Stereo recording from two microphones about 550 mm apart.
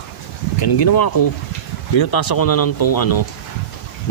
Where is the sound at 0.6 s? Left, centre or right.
Left.